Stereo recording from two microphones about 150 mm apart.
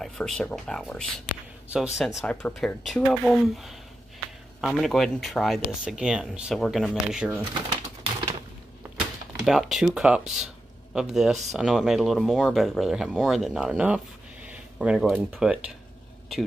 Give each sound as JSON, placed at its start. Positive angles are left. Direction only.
{"t": 0.0, "sound": "speech", "side_deg": 5}
{"t": 8.0, "sound": "typewriter", "side_deg": -30}
{"t": 9.4, "sound": "speech", "side_deg": 0}